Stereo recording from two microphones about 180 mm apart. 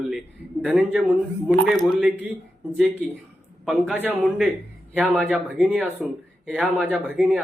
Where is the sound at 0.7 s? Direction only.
5° right (ahead or behind).